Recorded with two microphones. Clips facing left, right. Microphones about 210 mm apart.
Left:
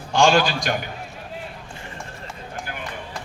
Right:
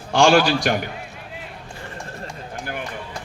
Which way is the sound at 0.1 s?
60° right (ahead or behind).